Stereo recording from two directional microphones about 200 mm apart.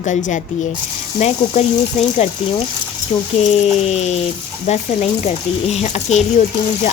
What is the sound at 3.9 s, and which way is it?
Speech, 35° left (ahead or behind).